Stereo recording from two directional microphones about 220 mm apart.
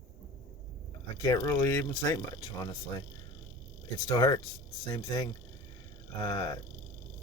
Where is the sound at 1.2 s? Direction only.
15° left (ahead or behind).